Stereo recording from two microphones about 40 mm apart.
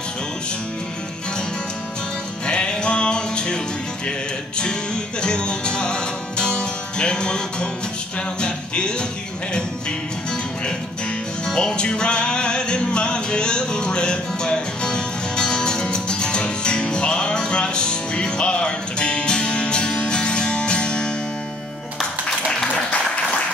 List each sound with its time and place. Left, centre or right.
2.4 s music: left
5.2 s music: left
11.4 s music: centre